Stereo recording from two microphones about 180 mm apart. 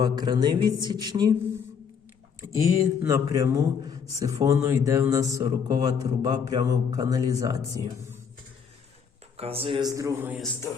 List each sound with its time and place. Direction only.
0.0 s speech: 20° right (ahead or behind)
2.4 s speech: 15° right (ahead or behind)
9.4 s speech: 30° right (ahead or behind)
9.9 s a man's voice: 15° right (ahead or behind)